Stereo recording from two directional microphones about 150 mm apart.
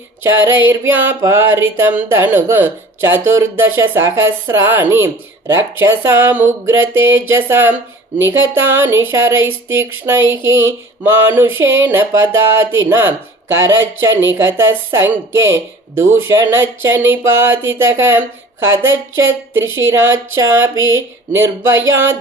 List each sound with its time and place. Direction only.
0.2 s speech: 15° right (ahead or behind)